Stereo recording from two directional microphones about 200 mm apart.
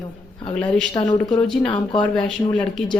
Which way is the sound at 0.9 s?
25° left (ahead or behind).